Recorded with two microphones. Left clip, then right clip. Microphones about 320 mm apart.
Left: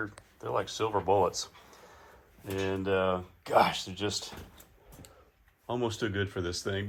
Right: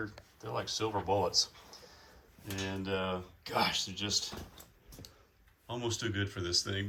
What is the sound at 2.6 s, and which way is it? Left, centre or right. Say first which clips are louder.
Speech: left 7 dB; centre.